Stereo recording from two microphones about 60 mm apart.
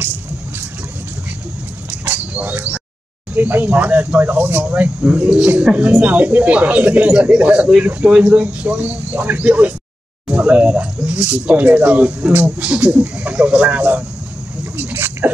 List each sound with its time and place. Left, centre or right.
1.9 s bird: right
3.3 s speech: right
12.3 s speech: right
12.5 s speech: right
14.9 s dog: right